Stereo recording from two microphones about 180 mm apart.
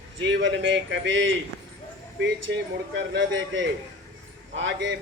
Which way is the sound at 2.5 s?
90° right.